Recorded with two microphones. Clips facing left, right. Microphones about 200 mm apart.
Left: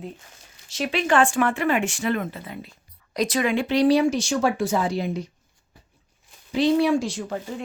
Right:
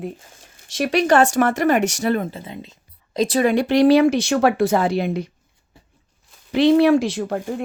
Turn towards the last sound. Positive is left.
turn(degrees=-55)  # may be behind; listen again after turning